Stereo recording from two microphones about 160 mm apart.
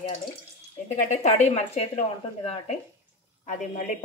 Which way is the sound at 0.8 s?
45° left (ahead or behind).